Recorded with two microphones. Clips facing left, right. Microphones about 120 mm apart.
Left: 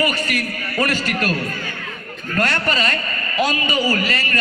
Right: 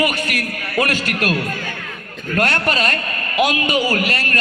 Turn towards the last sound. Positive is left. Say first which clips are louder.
# right 1 dB
turn(degrees=-60)  # may be behind; listen again after turning